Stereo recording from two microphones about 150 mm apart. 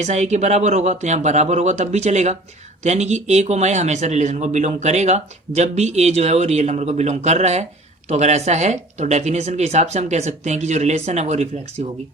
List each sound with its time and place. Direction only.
0.0 s speech: 50° right (ahead or behind)